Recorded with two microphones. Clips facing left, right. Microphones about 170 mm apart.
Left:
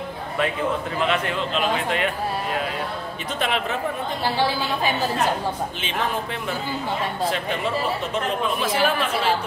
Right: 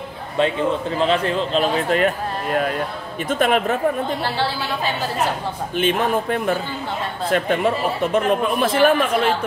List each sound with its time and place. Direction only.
0.4 s a man's voice: 30° right (ahead or behind); by 3.7 s 50° right (ahead or behind)
4.2 s a woman's voice: 15° left (ahead or behind)
5.8 s speech: 50° right (ahead or behind)